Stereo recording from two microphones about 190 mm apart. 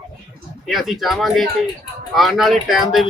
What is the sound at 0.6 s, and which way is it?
Speech, centre (ahead or behind).